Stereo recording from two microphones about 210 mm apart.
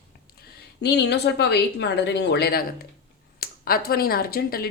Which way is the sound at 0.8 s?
55° left (ahead or behind).